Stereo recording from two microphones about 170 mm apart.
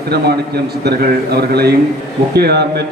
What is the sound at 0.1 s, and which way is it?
A man's voice, 70° right (ahead or behind).